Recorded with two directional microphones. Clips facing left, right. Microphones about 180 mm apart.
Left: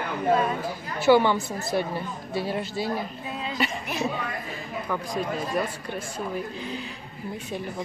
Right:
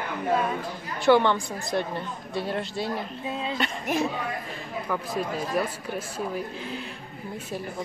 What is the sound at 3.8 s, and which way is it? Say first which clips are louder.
Speech: right 3 dB; 50° right (ahead or behind).